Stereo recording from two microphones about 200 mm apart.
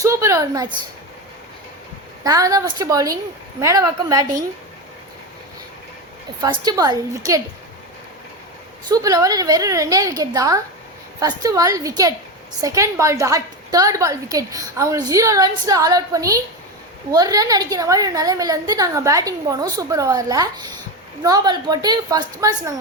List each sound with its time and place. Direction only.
0.0 s a sound: 15° right (ahead or behind)
2.2 s a woman's voice: 15° right (ahead or behind)
6.4 s a woman's voice: 20° right (ahead or behind)
8.9 s a woman's voice: 15° right (ahead or behind)